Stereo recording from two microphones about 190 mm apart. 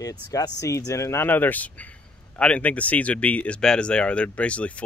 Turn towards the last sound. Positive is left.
turn(degrees=5)  # may be behind; listen again after turning